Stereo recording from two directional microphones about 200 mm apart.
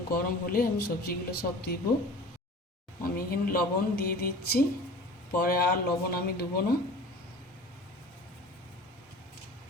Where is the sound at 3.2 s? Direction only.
45° left (ahead or behind).